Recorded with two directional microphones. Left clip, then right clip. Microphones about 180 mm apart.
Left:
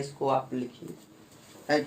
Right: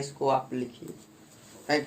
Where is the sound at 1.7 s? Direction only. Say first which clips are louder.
Left 1 dB; 45° right (ahead or behind).